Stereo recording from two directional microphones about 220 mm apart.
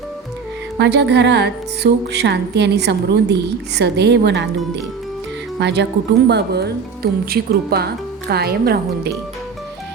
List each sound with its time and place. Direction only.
0.8 s music: 50° right (ahead or behind)
5.5 s music: 50° right (ahead or behind)